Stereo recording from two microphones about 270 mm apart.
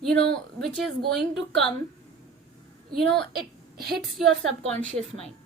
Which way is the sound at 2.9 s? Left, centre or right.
Centre.